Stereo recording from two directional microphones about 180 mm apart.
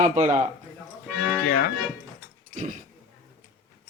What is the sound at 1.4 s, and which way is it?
Speech, 50° left (ahead or behind).